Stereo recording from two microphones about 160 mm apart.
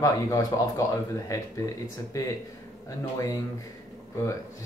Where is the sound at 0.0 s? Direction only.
20° left (ahead or behind).